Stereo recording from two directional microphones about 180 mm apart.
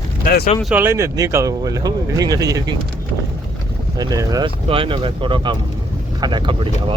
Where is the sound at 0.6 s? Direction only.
5° right (ahead or behind).